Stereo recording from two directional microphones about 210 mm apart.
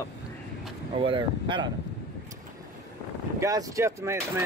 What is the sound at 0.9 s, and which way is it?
Speech, 25° right (ahead or behind).